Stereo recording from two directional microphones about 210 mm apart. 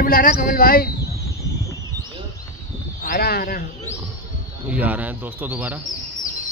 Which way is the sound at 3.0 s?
45° left (ahead or behind).